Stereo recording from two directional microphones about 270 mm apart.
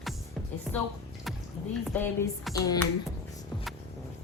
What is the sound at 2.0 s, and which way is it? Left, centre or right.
Speech, centre.